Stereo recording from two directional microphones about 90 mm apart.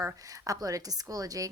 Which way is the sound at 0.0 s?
40° right (ahead or behind).